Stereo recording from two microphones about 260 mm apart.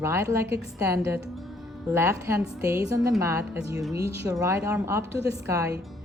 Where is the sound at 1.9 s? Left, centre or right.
Centre.